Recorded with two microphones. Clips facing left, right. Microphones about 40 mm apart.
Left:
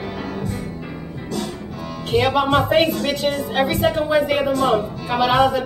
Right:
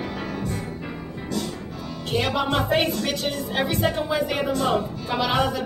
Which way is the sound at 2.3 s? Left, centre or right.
Left.